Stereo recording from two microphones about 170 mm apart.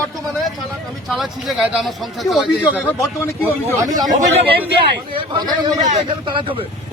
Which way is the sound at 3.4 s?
15° right (ahead or behind).